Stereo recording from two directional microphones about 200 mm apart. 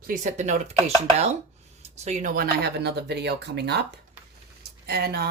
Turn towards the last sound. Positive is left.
turn(degrees=-55)  # may be behind; listen again after turning